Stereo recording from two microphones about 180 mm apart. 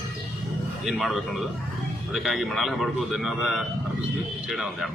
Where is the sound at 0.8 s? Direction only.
Centre (ahead or behind).